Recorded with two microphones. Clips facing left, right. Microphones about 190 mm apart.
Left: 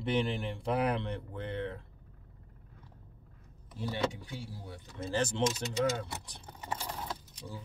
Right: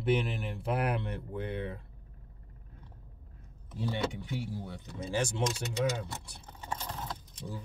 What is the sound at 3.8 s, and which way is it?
Speech, 20° right (ahead or behind).